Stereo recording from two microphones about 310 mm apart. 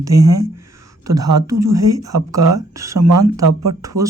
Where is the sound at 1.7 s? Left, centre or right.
Right.